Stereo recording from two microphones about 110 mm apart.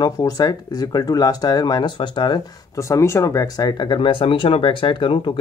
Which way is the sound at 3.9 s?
50° left (ahead or behind).